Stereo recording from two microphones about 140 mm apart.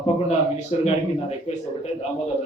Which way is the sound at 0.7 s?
45° left (ahead or behind).